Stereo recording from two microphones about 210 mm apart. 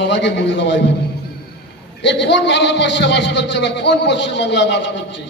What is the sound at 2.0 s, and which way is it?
A man's voice, 55° left (ahead or behind).